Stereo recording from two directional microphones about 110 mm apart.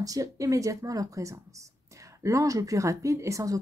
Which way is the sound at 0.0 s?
30° right (ahead or behind).